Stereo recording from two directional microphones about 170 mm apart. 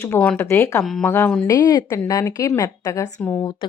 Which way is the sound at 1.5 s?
20° left (ahead or behind).